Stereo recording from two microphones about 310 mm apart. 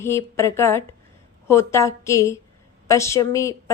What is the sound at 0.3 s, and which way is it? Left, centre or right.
Speech, centre.